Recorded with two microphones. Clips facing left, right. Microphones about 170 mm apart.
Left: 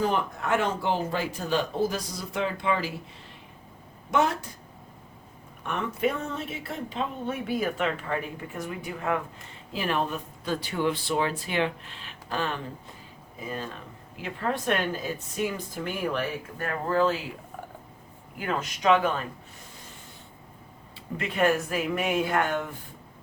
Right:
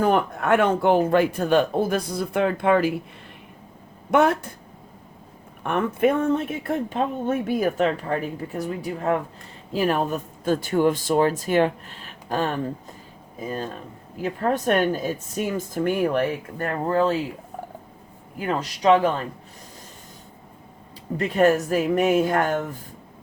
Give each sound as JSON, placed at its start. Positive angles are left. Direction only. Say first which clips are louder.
{"t": 0.0, "sound": "speech", "louder": "right 6 dB", "side_deg": -55}
{"t": 4.1, "sound": "speech", "louder": "right 6 dB", "side_deg": -55}
{"t": 5.6, "sound": "a woman's voice", "louder": "right 7 dB", "side_deg": -55}
{"t": 16.6, "sound": "speech", "louder": "right 3 dB", "side_deg": -25}
{"t": 18.4, "sound": "a woman's voice", "louder": "right 5 dB", "side_deg": -35}
{"t": 21.2, "sound": "a woman's voice", "louder": "right 6 dB", "side_deg": -40}